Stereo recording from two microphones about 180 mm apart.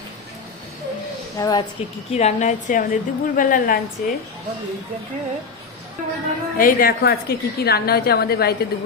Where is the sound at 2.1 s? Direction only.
40° left (ahead or behind).